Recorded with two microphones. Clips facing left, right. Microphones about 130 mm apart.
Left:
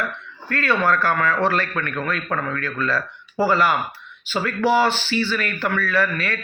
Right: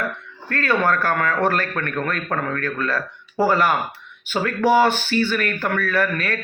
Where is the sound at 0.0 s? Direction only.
45° right (ahead or behind).